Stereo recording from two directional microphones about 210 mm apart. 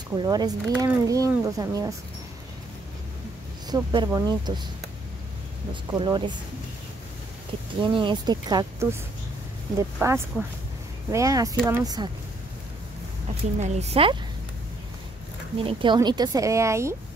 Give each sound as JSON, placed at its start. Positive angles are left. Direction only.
{"t": 0.1, "sound": "speech", "side_deg": -20}
{"t": 3.7, "sound": "speech", "side_deg": -20}
{"t": 5.7, "sound": "speech", "side_deg": -20}
{"t": 7.8, "sound": "speech", "side_deg": -20}
{"t": 9.9, "sound": "speech", "side_deg": -10}
{"t": 13.6, "sound": "a woman's voice", "side_deg": -30}
{"t": 15.6, "sound": "speech", "side_deg": -20}